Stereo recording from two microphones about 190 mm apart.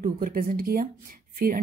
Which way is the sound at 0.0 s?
45° right (ahead or behind).